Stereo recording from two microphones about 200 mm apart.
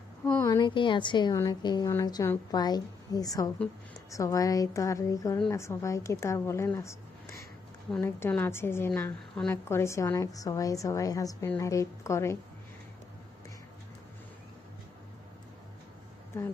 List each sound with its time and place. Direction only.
0.3 s a woman's voice: 15° left (ahead or behind)